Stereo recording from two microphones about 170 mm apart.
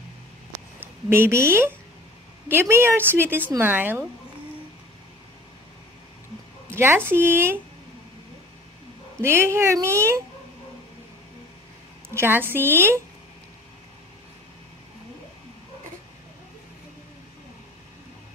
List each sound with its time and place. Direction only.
0.7 s a woman's voice: 15° right (ahead or behind)
6.7 s speech: 15° right (ahead or behind)
9.2 s speech: 15° right (ahead or behind)
12.1 s speech: 15° right (ahead or behind)